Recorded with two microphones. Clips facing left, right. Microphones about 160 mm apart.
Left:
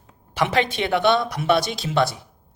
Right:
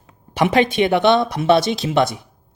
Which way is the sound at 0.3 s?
15° right (ahead or behind).